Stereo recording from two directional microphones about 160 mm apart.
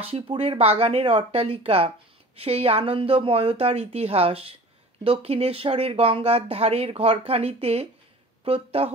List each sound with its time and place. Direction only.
0.0 s speech: 40° right (ahead or behind)